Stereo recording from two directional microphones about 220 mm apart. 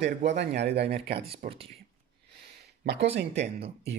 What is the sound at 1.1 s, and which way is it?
Speech, 25° right (ahead or behind).